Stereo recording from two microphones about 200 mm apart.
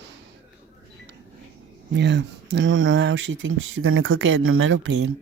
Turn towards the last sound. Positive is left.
turn(degrees=-75)  # may be behind; listen again after turning